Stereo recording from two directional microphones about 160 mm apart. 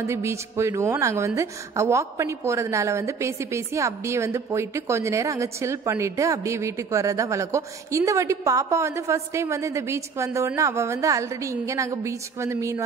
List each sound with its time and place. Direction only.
0.0 s a woman's voice: 15° right (ahead or behind)